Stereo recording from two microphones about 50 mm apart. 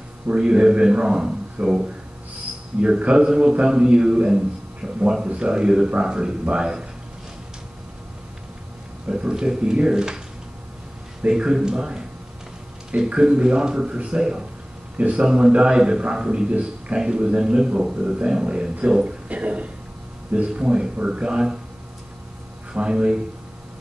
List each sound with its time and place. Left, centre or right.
0.3 s a man's voice: centre
4.8 s a sound: centre
5.2 s a man's voice: right
9.1 s a man's voice: centre
11.2 s a man's voice: centre
19.0 s a sound: right
20.4 s a man's voice: centre
22.7 s a man's voice: centre